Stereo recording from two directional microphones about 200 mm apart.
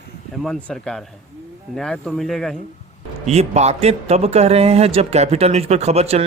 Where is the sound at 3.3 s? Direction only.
35° right (ahead or behind).